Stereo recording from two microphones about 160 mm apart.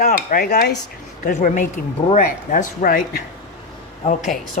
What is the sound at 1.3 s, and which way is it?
Speech, 55° left (ahead or behind).